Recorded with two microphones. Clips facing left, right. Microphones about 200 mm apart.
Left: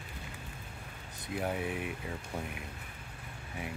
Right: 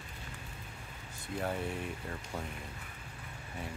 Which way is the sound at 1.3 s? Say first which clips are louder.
Left 1 dB; 10° left (ahead or behind).